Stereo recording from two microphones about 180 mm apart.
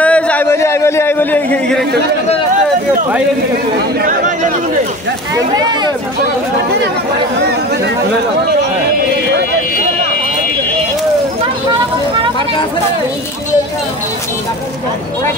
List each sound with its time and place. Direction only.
0.0 s a sound: 10° left (ahead or behind)
4.0 s speech: 45° right (ahead or behind)
5.3 s speech: 20° right (ahead or behind)